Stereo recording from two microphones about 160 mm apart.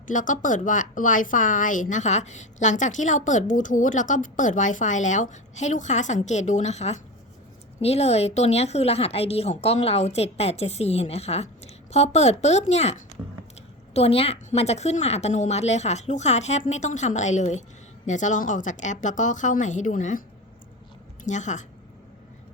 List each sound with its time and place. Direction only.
0.1 s a woman's voice: 55° left (ahead or behind)
21.2 s speech: 50° left (ahead or behind)